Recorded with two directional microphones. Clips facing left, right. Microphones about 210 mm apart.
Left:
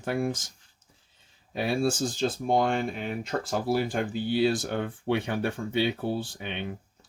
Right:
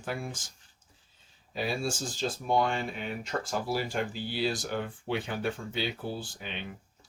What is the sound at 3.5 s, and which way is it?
Speech, 55° left (ahead or behind).